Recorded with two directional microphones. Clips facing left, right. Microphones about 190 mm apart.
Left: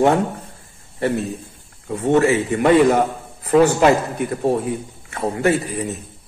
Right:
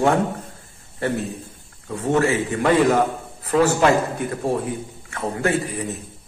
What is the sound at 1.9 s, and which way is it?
Speech, 20° left (ahead or behind).